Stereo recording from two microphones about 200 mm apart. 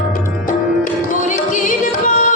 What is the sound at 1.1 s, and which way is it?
Music, 40° left (ahead or behind).